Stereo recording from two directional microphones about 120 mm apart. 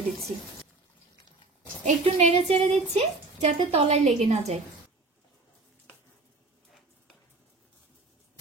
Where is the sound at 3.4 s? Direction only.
75° right (ahead or behind).